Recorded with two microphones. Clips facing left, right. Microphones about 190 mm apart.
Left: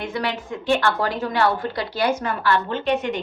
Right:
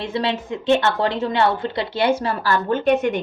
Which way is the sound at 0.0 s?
25° right (ahead or behind).